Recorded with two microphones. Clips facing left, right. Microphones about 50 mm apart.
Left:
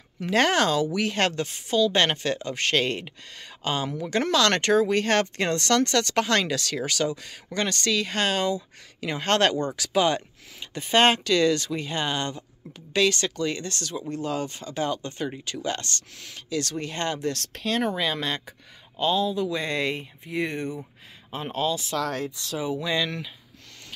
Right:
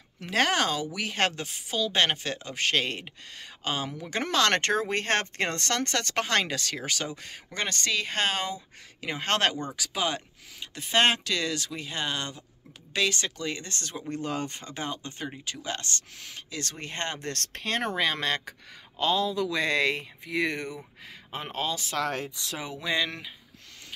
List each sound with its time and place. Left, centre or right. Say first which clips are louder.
0.2 s speech: left 4 dB; centre
4.3 s speech: left 2 dB; right
14.1 s speech: left 2 dB; right
14.8 s speech: left 7 dB; right
17.2 s speech: left 6 dB; right
18.9 s speech: left 2 dB; right
21.3 s speech: left 5 dB; right
22.8 s speech: left 2 dB; right